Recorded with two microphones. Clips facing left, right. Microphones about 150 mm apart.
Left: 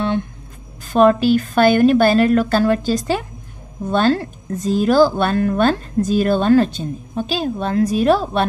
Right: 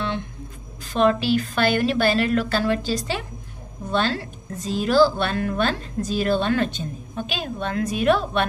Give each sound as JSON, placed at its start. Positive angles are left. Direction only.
{"t": 0.9, "sound": "a woman's voice", "side_deg": 45}